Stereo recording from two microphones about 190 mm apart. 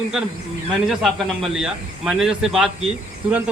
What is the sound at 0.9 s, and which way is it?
Speech, centre (ahead or behind).